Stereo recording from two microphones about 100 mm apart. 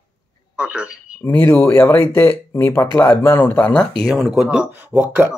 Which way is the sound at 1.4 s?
20° left (ahead or behind).